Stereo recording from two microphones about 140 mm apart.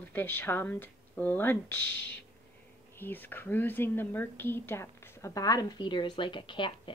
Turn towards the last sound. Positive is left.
turn(degrees=35)  # may be behind; listen again after turning